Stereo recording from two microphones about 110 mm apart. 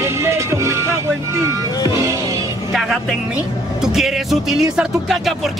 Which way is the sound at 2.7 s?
Centre (ahead or behind).